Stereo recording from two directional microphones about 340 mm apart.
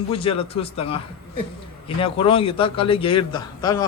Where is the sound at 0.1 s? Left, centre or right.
Centre.